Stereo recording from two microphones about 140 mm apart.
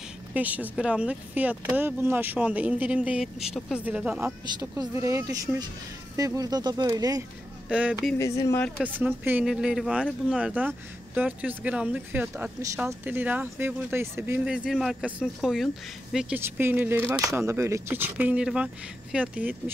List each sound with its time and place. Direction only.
0.3 s speech: 10° right (ahead or behind)
4.6 s speech: 25° right (ahead or behind)
7.7 s speech: 10° right (ahead or behind)
8.2 s speech: 20° left (ahead or behind)
8.7 s speech: 10° right (ahead or behind)
14.4 s speech: 5° right (ahead or behind)
16.3 s speech: 15° right (ahead or behind)